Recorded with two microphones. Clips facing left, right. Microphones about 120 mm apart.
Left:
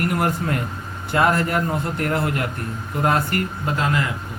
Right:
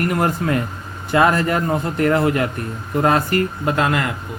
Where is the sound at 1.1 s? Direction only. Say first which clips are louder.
Right 3 dB; 90° right.